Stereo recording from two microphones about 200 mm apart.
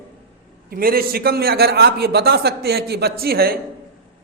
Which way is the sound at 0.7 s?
45° right (ahead or behind).